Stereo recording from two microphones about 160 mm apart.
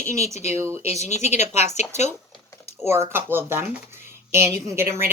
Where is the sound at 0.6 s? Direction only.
15° right (ahead or behind).